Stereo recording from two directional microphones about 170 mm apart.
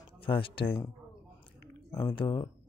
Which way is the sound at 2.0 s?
25° left (ahead or behind).